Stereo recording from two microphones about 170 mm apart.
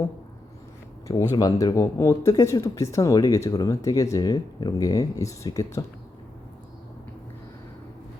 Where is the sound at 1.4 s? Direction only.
20° left (ahead or behind).